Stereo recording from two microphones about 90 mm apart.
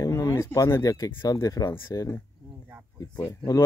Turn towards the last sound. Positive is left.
turn(degrees=35)  # may be behind; listen again after turning